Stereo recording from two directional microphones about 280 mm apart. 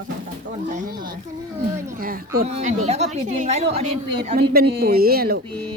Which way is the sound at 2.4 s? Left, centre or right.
Right.